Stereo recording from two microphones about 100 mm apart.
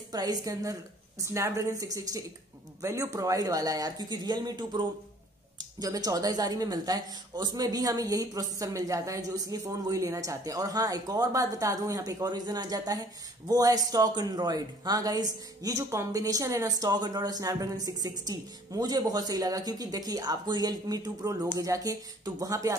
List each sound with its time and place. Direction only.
0.1 s speech: 40° right (ahead or behind)